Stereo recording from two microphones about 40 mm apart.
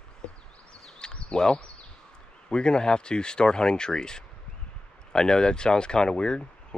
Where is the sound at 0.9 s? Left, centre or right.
Left.